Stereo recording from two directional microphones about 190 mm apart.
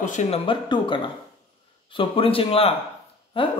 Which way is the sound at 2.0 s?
30° left (ahead or behind).